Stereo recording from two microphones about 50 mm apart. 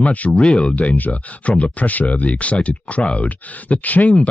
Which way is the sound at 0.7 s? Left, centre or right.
Left.